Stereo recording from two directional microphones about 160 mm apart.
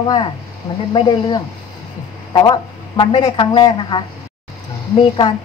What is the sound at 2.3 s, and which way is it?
Speech, 25° left (ahead or behind).